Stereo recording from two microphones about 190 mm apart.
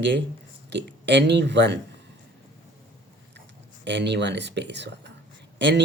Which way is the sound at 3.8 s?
65° right (ahead or behind).